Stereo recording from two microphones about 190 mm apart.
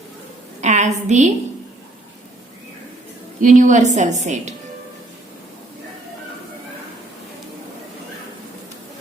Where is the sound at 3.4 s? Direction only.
40° right (ahead or behind).